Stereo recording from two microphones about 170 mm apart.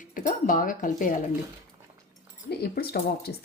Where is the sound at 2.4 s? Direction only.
65° left (ahead or behind).